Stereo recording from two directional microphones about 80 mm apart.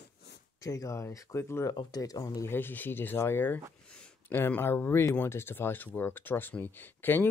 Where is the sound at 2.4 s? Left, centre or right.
Left.